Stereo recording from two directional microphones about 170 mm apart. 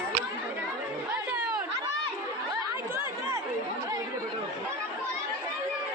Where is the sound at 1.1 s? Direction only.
5° right (ahead or behind).